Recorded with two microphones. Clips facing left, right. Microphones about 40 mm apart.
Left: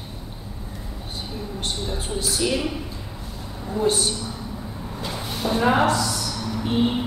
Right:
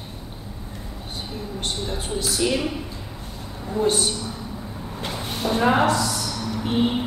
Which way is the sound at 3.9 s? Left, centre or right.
Right.